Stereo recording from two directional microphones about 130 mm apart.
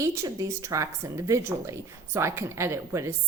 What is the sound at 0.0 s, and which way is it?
Speech, 25° right (ahead or behind).